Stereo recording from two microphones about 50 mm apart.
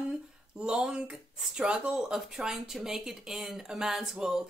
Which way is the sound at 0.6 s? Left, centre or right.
Centre.